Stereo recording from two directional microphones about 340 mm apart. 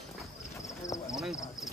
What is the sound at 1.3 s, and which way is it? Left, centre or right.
Speech, centre.